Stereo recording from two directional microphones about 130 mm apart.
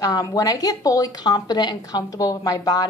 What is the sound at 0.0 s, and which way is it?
A woman's voice, 30° left (ahead or behind).